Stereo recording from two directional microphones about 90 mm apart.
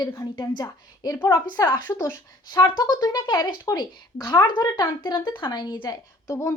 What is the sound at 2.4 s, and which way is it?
A woman's voice, 50° left (ahead or behind).